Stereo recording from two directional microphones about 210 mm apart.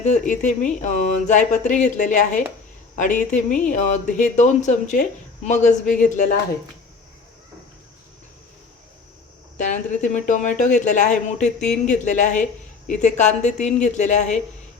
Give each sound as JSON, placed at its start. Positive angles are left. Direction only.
{"t": 0.0, "sound": "speech", "side_deg": 35}
{"t": 9.6, "sound": "speech", "side_deg": 35}
{"t": 11.6, "sound": "speech", "side_deg": 5}
{"t": 12.0, "sound": "speech", "side_deg": 35}